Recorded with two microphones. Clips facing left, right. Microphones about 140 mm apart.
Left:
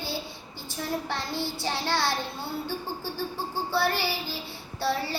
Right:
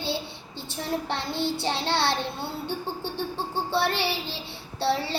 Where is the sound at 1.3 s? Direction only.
20° right (ahead or behind).